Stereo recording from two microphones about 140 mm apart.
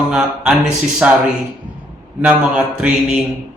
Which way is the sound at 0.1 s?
5° right (ahead or behind).